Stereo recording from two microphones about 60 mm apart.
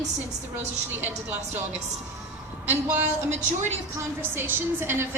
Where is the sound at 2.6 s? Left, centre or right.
Right.